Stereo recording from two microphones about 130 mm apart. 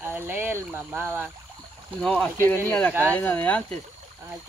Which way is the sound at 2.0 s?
5° left (ahead or behind).